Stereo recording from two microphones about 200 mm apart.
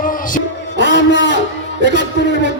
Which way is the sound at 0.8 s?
65° left (ahead or behind).